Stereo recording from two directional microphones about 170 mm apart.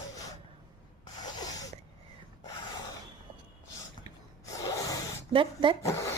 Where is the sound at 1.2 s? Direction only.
25° left (ahead or behind).